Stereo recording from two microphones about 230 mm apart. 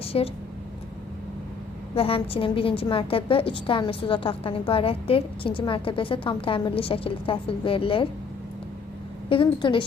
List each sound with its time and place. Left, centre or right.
0.0 s a sound: left
2.0 s a woman's voice: left
9.3 s a woman's voice: left